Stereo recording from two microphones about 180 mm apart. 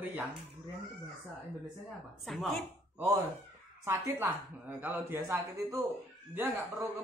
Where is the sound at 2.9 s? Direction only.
15° right (ahead or behind).